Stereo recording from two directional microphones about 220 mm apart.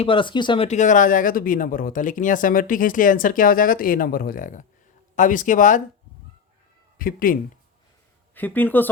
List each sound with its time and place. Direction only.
0.0 s speech: 25° left (ahead or behind)
7.0 s speech: 40° left (ahead or behind)
8.4 s speech: 10° left (ahead or behind)